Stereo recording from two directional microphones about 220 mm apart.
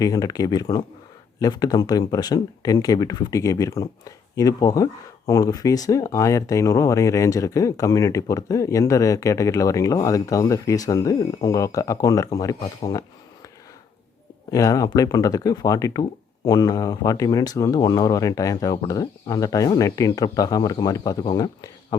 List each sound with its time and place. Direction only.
0.0 s speech: 15° left (ahead or behind)
14.5 s speech: 15° left (ahead or behind)